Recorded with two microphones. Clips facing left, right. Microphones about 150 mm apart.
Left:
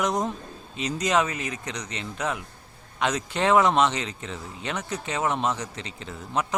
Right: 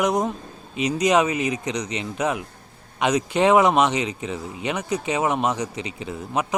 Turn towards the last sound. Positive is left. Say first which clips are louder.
# right 3 dB
turn(degrees=-15)  # may be behind; listen again after turning